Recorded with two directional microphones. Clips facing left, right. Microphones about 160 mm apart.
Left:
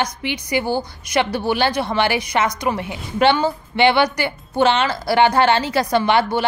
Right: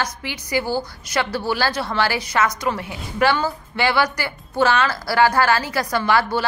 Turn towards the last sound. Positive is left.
turn(degrees=20)  # may be behind; listen again after turning